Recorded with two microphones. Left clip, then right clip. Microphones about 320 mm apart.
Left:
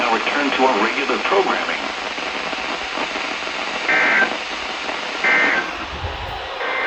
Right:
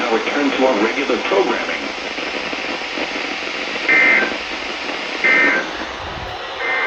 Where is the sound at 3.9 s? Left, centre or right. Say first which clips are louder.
Right 4 dB; centre.